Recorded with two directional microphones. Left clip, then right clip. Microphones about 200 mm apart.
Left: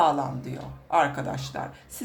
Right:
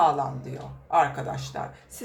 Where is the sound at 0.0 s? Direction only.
30° left (ahead or behind).